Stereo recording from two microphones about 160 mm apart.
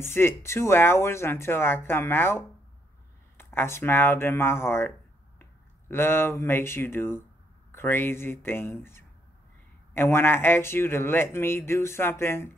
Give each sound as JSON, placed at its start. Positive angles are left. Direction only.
{"t": 0.0, "sound": "speech", "side_deg": 15}